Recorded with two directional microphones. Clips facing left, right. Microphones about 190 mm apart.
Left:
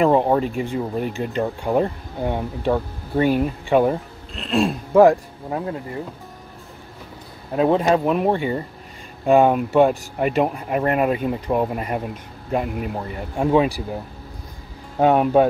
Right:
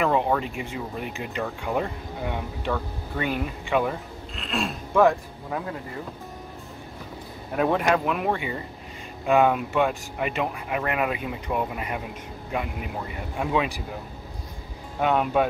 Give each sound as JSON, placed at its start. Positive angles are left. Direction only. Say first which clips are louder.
{"t": 0.0, "sound": "speech", "louder": "left 6 dB", "side_deg": 35}
{"t": 7.5, "sound": "speech", "louder": "left 5 dB", "side_deg": 25}
{"t": 15.0, "sound": "speech", "louder": "left 7 dB", "side_deg": 35}